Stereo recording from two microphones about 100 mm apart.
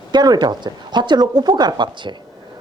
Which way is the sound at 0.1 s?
45° right (ahead or behind).